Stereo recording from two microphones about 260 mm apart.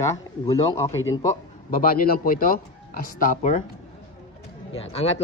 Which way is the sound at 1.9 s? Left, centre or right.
Left.